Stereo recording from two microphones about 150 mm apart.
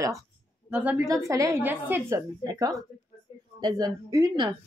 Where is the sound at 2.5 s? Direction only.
25° right (ahead or behind).